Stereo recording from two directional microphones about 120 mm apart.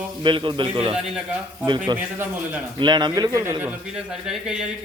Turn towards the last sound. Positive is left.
turn(degrees=-30)  # may be behind; listen again after turning